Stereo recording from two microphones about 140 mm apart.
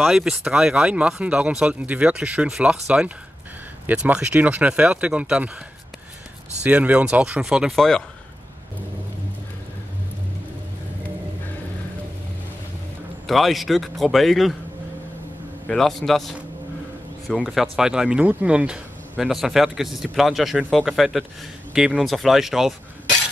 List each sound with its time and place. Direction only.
0.0 s speech: 5° right (ahead or behind)
3.8 s speech: 10° right (ahead or behind)
6.6 s speech: 10° right (ahead or behind)
13.3 s speech: centre (ahead or behind)
15.7 s speech: centre (ahead or behind)